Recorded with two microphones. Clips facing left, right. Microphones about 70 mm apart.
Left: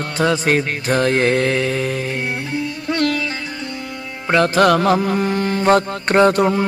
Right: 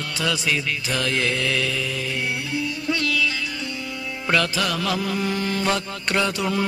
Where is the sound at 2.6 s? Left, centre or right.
Left.